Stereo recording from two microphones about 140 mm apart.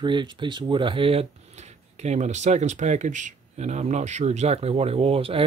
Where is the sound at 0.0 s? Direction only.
35° right (ahead or behind).